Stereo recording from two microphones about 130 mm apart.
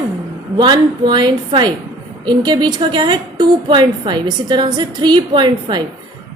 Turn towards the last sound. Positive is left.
turn(degrees=-35)  # may be behind; listen again after turning